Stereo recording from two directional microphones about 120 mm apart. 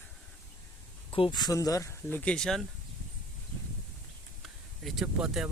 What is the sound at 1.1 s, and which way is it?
Speech, 45° left (ahead or behind).